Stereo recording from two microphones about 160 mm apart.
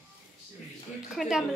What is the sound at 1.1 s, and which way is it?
Speech, centre (ahead or behind).